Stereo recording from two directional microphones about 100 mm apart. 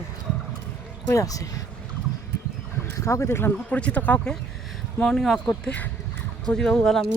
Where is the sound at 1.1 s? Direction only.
35° left (ahead or behind).